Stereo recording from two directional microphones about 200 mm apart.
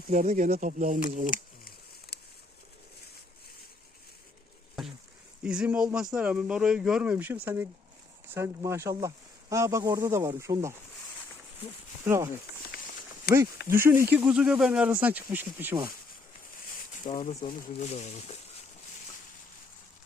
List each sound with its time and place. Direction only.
0.1 s speech: 40° right (ahead or behind)
1.3 s a sound: 45° left (ahead or behind)
5.4 s speech: 5° right (ahead or behind)
12.0 s speech: 15° right (ahead or behind)
13.7 s speech: 10° right (ahead or behind)
17.1 s speech: 40° left (ahead or behind)